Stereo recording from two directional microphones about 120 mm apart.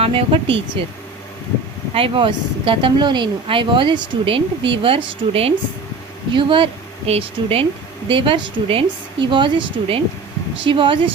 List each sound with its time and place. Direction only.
0.0 s speech: 50° right (ahead or behind)
1.9 s speech: 45° right (ahead or behind)